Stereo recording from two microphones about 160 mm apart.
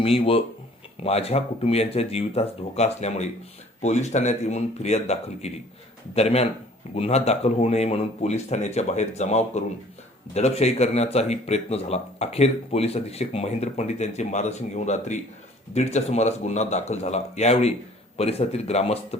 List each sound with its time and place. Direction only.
0.0 s speech: 35° left (ahead or behind)